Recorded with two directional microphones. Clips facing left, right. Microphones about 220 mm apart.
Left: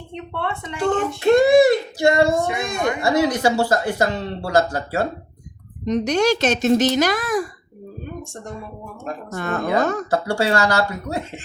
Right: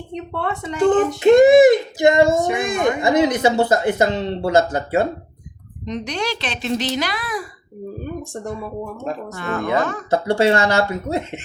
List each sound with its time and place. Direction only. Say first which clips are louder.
0.1 s speech: right 2 dB; 35° right (ahead or behind)
1.2 s a child's voice: right 3 dB; 20° right (ahead or behind)
5.8 s speech: left 7 dB; 45° left (ahead or behind)
9.3 s speech: left 1 dB; 45° left (ahead or behind)
10.1 s a child's voice: right 4 dB; 20° right (ahead or behind)